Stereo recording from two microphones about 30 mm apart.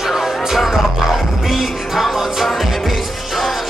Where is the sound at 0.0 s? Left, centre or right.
Centre.